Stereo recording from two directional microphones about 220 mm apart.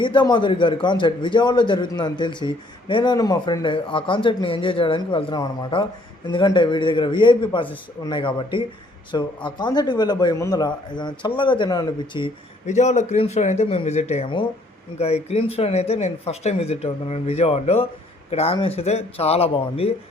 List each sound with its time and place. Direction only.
0.0 s speech: 20° left (ahead or behind)
12.6 s speech: 30° left (ahead or behind)